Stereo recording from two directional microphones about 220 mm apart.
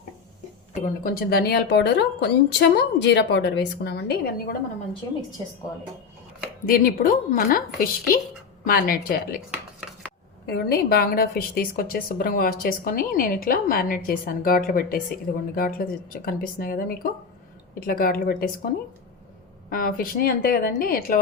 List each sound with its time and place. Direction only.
0.7 s a woman's voice: 40° left (ahead or behind)
6.7 s a woman's voice: 40° left (ahead or behind)
10.4 s a woman's voice: 45° left (ahead or behind)
19.7 s a woman's voice: 40° left (ahead or behind)